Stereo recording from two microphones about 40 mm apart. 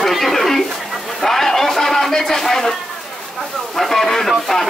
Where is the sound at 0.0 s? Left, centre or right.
Centre.